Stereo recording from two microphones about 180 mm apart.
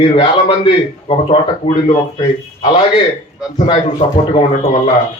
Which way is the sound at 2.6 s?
25° left (ahead or behind).